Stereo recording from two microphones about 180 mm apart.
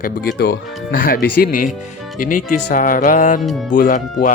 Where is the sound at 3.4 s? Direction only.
Centre (ahead or behind).